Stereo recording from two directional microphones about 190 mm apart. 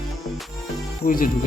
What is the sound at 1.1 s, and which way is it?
Speech, 45° left (ahead or behind).